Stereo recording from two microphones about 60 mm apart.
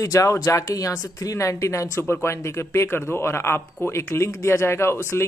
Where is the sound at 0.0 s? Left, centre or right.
Left.